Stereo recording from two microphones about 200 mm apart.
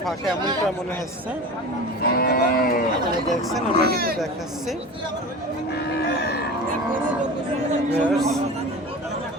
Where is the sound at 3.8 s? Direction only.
50° right (ahead or behind).